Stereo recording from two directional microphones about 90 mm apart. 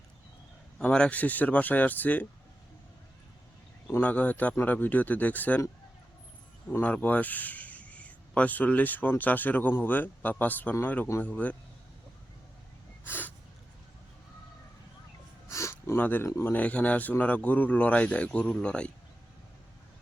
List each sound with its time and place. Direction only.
0.8 s a man's voice: 10° left (ahead or behind)
4.0 s a man's voice: 20° left (ahead or behind)
6.8 s a man's voice: 15° left (ahead or behind)
13.1 s snort: 20° left (ahead or behind)
15.4 s a sound: 30° left (ahead or behind)
16.0 s speech: 20° left (ahead or behind)
16.2 s speech: 35° left (ahead or behind)
16.5 s a man's voice: 15° left (ahead or behind)